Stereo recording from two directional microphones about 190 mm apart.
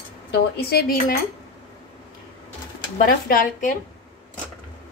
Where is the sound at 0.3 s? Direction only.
55° left (ahead or behind).